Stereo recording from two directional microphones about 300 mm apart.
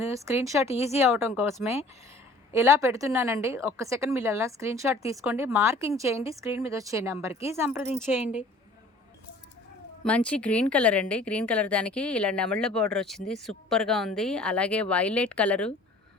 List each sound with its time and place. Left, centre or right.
0.0 s a woman's voice: centre
0.7 s speech: left
1.0 s a woman's voice: centre
10.0 s a woman's voice: centre